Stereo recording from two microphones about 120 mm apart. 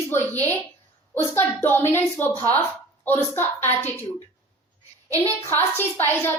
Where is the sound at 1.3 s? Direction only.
20° left (ahead or behind).